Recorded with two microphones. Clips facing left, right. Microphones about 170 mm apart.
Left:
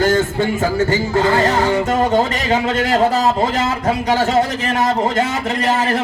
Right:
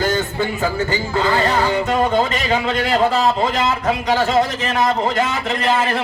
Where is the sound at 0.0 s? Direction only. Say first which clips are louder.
Left 4 dB; 50° left (ahead or behind).